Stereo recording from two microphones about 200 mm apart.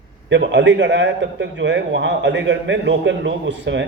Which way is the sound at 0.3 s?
60° right (ahead or behind).